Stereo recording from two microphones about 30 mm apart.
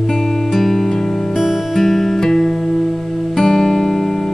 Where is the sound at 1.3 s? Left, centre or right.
Centre.